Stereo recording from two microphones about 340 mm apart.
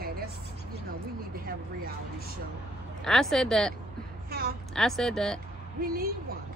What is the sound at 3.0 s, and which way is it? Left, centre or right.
Speech, centre.